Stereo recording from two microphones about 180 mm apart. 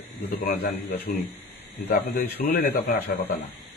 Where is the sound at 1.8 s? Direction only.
60° left (ahead or behind).